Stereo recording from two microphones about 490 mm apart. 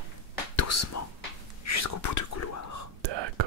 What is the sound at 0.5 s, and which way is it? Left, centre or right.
Whispering, left.